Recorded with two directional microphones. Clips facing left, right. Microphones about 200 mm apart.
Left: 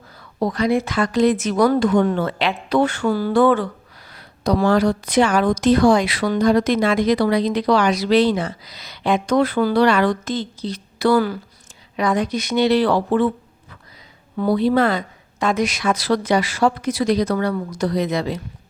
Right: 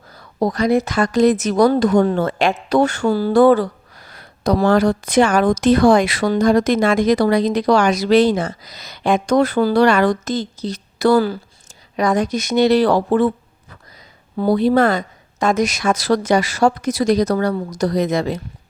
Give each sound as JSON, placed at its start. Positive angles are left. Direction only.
{"t": 0.2, "sound": "a woman's voice", "side_deg": -40}
{"t": 14.3, "sound": "a woman's voice", "side_deg": -40}